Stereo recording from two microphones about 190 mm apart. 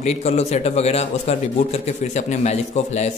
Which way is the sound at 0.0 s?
35° left (ahead or behind).